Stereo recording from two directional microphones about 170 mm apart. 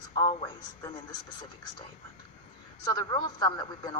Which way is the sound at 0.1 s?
25° left (ahead or behind).